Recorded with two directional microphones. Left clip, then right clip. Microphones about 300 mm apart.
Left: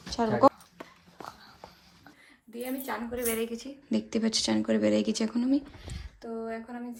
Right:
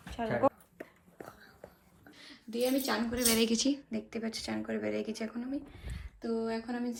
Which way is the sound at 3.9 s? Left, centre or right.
Centre.